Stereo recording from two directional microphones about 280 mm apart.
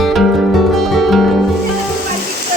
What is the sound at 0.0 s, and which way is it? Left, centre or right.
Music, centre.